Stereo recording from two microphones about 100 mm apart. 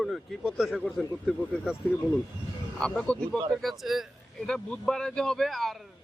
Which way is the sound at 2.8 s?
10° left (ahead or behind).